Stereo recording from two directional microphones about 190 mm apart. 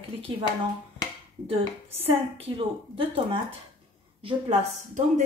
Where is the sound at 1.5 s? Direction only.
30° right (ahead or behind).